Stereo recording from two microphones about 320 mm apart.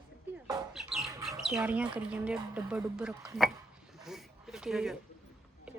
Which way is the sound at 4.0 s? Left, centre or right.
Centre.